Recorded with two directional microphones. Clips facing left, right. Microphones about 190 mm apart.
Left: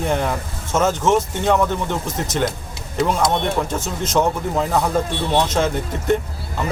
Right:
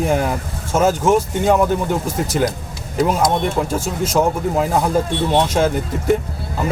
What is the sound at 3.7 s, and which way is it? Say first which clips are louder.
Speech: right 2 dB; 10° right (ahead or behind).